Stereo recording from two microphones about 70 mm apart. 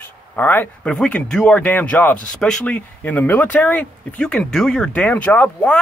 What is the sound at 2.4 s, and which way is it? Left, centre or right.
Speech, centre.